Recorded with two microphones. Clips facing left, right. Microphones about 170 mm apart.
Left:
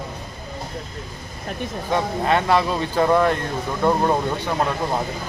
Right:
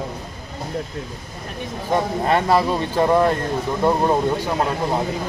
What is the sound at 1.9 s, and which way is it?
Speech, 35° right (ahead or behind).